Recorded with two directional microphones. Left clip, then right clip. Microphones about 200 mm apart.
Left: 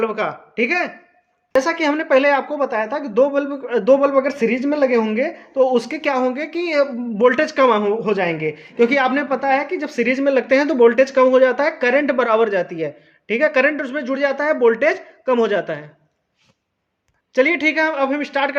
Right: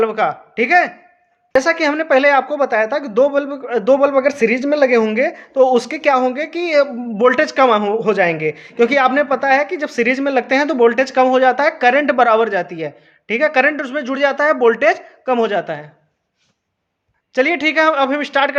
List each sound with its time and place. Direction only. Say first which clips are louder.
0.0 s a woman's voice: right 5 dB; 30° right (ahead or behind)
17.3 s a woman's voice: right 1 dB; 20° right (ahead or behind)